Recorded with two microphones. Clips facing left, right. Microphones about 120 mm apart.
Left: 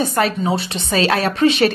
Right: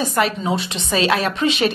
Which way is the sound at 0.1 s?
35° left (ahead or behind).